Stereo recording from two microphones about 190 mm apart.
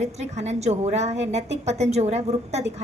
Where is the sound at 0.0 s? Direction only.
35° right (ahead or behind).